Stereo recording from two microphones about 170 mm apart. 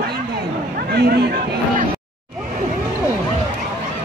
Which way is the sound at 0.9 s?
75° right (ahead or behind).